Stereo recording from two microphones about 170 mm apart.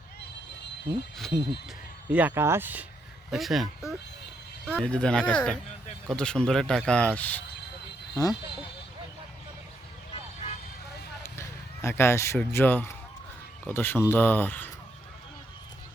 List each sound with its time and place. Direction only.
1.2 s speech: centre (ahead or behind)
2.0 s speech: 10° right (ahead or behind)
3.3 s speech: centre (ahead or behind)
8.1 s speech: 20° left (ahead or behind)
10.1 s vehicle: 40° left (ahead or behind)
11.2 s a sound: 15° left (ahead or behind)
12.4 s speech: 15° left (ahead or behind)